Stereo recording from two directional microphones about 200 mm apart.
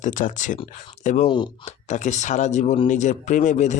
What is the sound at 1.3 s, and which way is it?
Speech, 25° left (ahead or behind).